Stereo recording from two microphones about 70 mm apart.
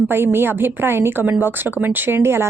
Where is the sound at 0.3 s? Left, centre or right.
Right.